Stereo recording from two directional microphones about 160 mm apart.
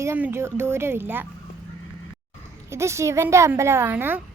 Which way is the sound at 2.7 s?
15° right (ahead or behind).